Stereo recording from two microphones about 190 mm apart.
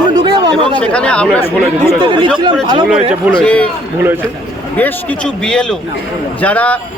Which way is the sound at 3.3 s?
5° left (ahead or behind).